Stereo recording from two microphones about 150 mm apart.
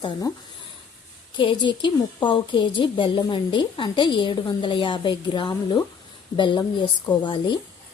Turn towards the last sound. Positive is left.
turn(degrees=30)  # may be behind; listen again after turning